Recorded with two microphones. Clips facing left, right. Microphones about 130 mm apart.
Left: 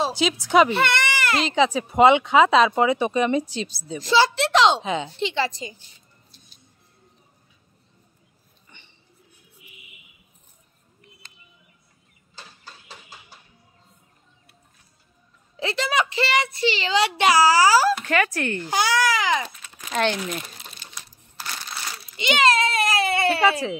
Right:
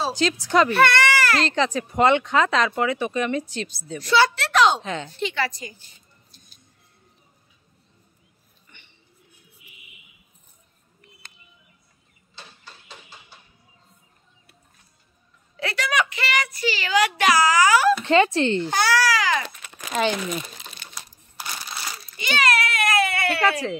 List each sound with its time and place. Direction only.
0.1 s a woman's voice: 5° left (ahead or behind)
0.7 s speech: 20° left (ahead or behind)
1.4 s a child's voice: 5° left (ahead or behind)
5.1 s a child's voice: 25° left (ahead or behind)
15.5 s a child's voice: 25° left (ahead or behind)
18.0 s speech: 25° right (ahead or behind)
18.7 s a child's voice: 15° left (ahead or behind)
19.4 s crumpling: 70° right (ahead or behind)
19.9 s speech: centre (ahead or behind)
21.4 s crumpling: 10° right (ahead or behind)
22.1 s a sound: 20° left (ahead or behind)